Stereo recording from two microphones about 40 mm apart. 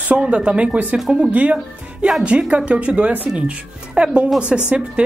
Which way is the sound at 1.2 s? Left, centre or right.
Right.